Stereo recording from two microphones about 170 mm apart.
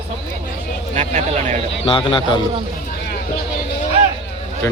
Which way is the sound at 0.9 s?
40° right (ahead or behind).